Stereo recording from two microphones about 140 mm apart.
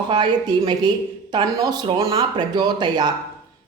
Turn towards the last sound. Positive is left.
turn(degrees=-30)  # may be behind; listen again after turning